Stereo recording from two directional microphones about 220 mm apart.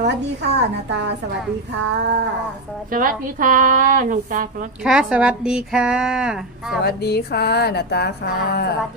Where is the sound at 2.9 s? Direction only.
40° right (ahead or behind).